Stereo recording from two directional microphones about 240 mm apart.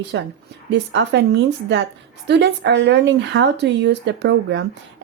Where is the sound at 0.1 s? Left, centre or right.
Right.